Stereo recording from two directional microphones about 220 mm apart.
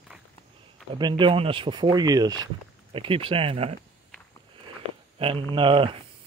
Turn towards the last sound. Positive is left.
turn(degrees=-25)  # may be behind; listen again after turning